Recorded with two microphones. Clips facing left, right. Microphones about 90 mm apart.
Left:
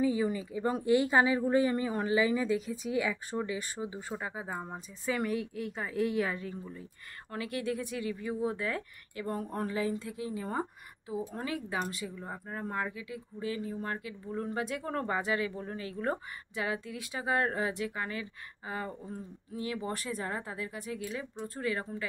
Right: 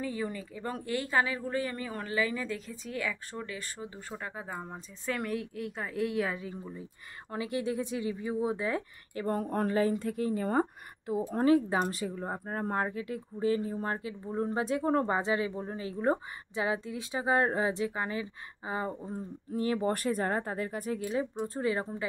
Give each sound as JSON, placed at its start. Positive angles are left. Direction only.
{"t": 0.0, "sound": "speech", "side_deg": 10}
{"t": 6.6, "sound": "speech", "side_deg": -15}
{"t": 9.1, "sound": "a woman's voice", "side_deg": -40}
{"t": 11.4, "sound": "speech", "side_deg": -35}
{"t": 19.5, "sound": "speech", "side_deg": -40}
{"t": 21.4, "sound": "speech", "side_deg": -25}